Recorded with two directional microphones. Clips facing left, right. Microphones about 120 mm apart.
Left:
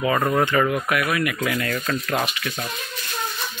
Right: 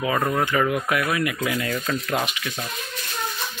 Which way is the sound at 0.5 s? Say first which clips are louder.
Left 1 dB; 10° right (ahead or behind).